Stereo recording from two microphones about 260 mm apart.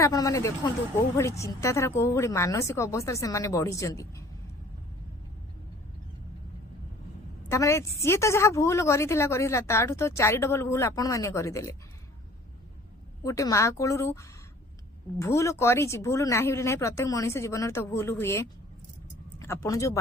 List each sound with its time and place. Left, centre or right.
0.0 s a woman's voice: centre
7.4 s a woman's voice: centre
13.2 s a woman's voice: centre